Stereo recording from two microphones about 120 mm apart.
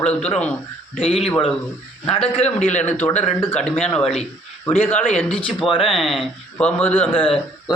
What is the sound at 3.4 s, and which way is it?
A man's voice, 15° left (ahead or behind).